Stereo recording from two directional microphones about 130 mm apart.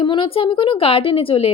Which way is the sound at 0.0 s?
40° left (ahead or behind).